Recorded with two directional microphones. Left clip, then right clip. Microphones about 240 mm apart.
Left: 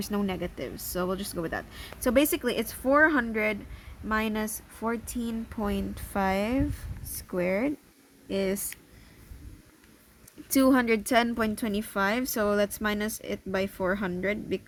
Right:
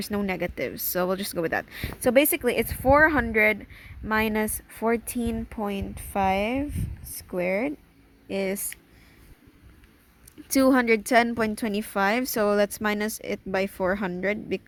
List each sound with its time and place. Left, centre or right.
0.0 s a woman's voice: right
5.5 s a woman's voice: centre
10.5 s a woman's voice: right